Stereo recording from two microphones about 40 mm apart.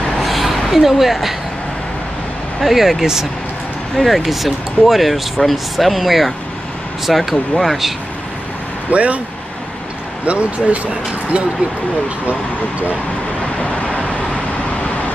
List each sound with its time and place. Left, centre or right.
0.2 s a sound: centre
2.6 s speech: centre
3.9 s speech: centre
8.9 s speech: right
10.2 s speech: right
13.6 s vehicle: left